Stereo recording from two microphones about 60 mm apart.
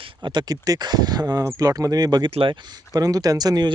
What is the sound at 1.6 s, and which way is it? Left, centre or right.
Speech, right.